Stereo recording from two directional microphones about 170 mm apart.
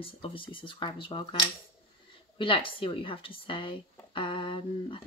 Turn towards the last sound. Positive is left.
turn(degrees=30)  # may be behind; listen again after turning